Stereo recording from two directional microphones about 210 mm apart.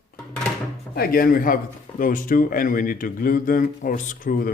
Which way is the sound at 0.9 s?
45° left (ahead or behind).